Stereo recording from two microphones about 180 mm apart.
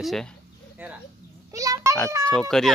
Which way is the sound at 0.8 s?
10° right (ahead or behind).